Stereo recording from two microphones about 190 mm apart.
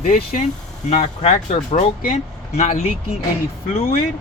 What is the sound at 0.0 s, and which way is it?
Speech, 50° left (ahead or behind).